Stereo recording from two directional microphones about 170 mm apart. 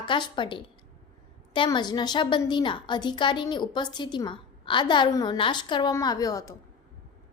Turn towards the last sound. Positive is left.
turn(degrees=20)  # may be behind; listen again after turning